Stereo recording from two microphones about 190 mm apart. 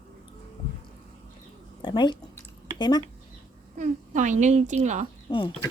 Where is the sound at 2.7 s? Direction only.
25° left (ahead or behind).